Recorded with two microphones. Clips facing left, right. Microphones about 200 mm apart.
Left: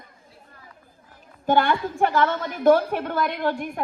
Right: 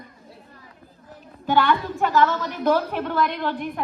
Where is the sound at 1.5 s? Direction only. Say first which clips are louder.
Even; 45° left (ahead or behind).